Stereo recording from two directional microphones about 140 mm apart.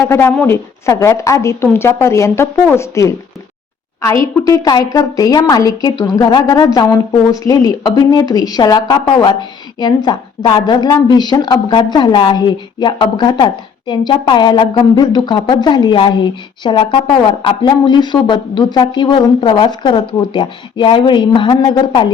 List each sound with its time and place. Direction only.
0.0 s a woman's voice: 20° left (ahead or behind); by 22.1 s 35° left (ahead or behind)